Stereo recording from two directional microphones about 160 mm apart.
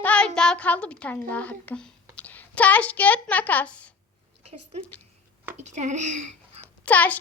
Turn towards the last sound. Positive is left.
turn(degrees=10)  # may be behind; listen again after turning